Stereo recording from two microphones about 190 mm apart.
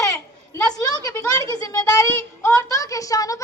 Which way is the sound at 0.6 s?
20° left (ahead or behind).